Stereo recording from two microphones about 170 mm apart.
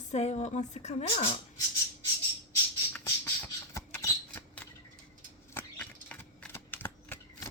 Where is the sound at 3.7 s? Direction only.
15° left (ahead or behind).